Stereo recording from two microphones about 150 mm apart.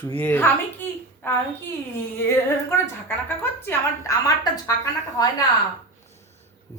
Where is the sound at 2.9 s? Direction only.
15° left (ahead or behind).